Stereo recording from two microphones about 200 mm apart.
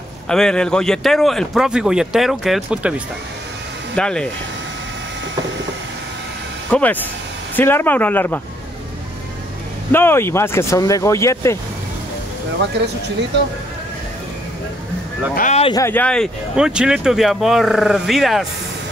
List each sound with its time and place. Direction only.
0.3 s speech: 5° left (ahead or behind)
6.7 s speech: 10° left (ahead or behind)
9.9 s speech: 10° left (ahead or behind)
15.3 s speech: 35° left (ahead or behind)
15.7 s speech: 10° left (ahead or behind)